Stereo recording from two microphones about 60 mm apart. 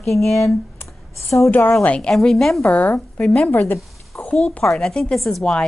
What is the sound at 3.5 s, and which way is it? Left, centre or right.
Speech, left.